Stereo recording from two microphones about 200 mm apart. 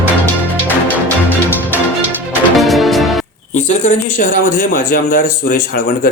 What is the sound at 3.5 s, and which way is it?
Speech, 40° left (ahead or behind).